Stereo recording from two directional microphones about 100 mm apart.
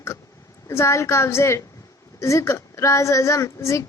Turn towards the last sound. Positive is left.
turn(degrees=30)  # may be behind; listen again after turning